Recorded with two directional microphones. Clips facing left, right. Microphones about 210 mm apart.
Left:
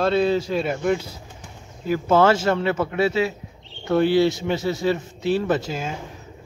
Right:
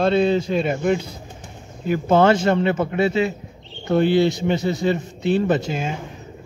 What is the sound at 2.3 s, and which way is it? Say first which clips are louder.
A man's voice: right 3 dB; 5° left (ahead or behind).